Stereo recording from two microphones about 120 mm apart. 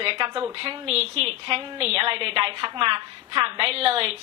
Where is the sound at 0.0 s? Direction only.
50° right (ahead or behind).